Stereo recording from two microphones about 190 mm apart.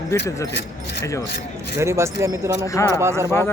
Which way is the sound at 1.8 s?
15° right (ahead or behind).